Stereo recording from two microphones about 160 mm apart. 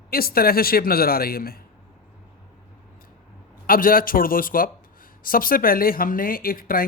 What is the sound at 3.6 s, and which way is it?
Speech, 65° left (ahead or behind).